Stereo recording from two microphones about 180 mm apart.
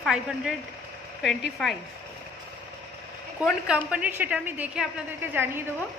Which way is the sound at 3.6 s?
5° right (ahead or behind).